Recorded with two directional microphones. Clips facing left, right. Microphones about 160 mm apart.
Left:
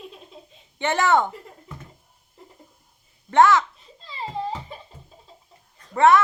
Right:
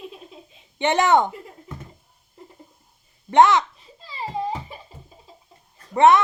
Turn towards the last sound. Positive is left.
turn(degrees=-20)  # may be behind; listen again after turning